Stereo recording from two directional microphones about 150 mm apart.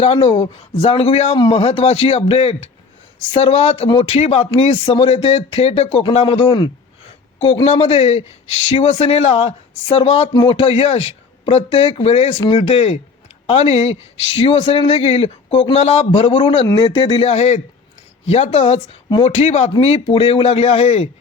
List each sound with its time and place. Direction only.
0.0 s speech: 35° left (ahead or behind)
6.0 s speech: 30° left (ahead or behind)
17.0 s speech: 40° left (ahead or behind)